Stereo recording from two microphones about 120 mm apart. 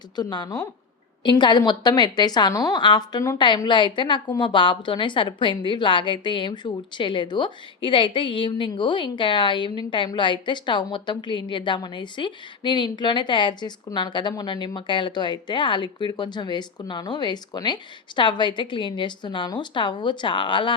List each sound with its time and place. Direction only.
0.2 s a woman's voice: 35° left (ahead or behind)